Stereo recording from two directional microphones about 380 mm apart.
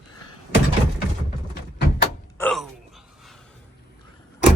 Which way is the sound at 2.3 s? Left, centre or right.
Centre.